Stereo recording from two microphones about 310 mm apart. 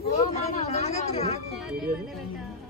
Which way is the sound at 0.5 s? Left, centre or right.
Left.